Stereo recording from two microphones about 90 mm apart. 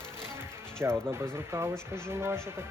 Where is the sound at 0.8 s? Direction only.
30° right (ahead or behind).